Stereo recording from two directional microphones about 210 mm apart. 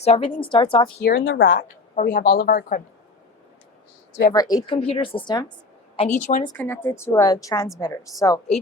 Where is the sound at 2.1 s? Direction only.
45° left (ahead or behind).